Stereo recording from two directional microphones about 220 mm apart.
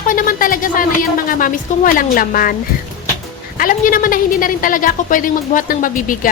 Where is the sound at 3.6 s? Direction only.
40° left (ahead or behind).